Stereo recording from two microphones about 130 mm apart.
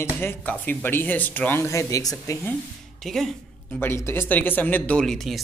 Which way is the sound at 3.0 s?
Centre (ahead or behind).